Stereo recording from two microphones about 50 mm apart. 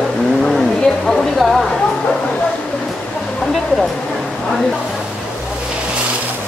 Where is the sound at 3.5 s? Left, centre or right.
Centre.